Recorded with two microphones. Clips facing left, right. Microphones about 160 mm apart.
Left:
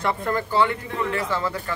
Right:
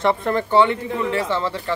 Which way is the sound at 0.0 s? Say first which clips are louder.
Right 5 dB; 25° right (ahead or behind).